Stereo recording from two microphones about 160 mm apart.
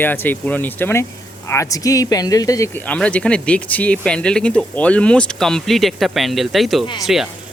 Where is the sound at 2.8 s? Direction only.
10° left (ahead or behind).